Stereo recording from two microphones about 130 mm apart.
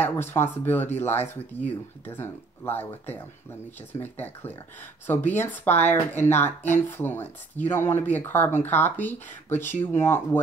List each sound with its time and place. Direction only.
0.0 s speech: 15° left (ahead or behind)